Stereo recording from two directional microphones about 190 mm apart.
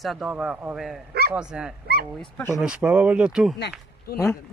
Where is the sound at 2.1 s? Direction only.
10° left (ahead or behind).